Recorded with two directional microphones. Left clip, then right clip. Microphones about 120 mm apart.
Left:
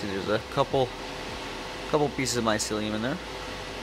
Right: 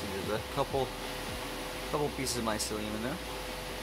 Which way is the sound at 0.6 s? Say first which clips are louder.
Left 7 dB; 50° left (ahead or behind).